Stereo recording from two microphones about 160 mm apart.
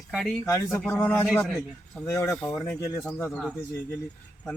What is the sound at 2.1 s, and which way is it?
Speech, 15° left (ahead or behind).